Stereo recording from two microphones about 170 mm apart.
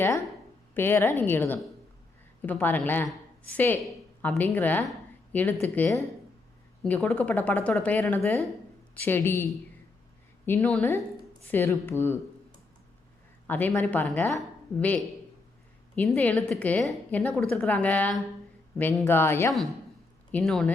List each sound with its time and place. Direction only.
0.0 s a woman's voice: 15° left (ahead or behind)
13.5 s a woman's voice: 10° left (ahead or behind)
16.0 s a woman's voice: 10° left (ahead or behind)
20.3 s speech: 5° left (ahead or behind)